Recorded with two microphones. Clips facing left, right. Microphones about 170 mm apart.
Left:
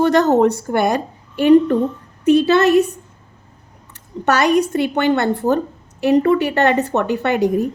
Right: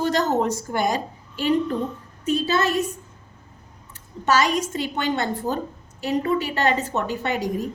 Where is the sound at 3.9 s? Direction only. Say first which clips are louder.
Left 3 dB; 65° left (ahead or behind).